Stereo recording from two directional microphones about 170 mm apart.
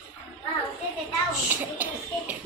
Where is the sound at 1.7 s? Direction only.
10° right (ahead or behind).